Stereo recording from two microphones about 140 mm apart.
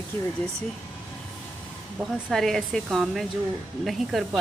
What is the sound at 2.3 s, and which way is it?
Speech, centre (ahead or behind).